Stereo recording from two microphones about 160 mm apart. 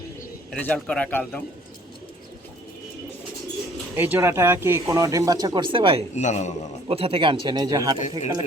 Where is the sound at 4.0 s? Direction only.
15° right (ahead or behind); by 6.0 s 35° right (ahead or behind).